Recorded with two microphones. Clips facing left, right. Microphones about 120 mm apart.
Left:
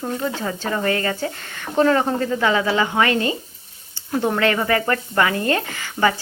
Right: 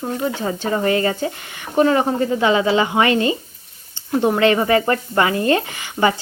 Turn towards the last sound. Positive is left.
turn(degrees=-20)  # may be behind; listen again after turning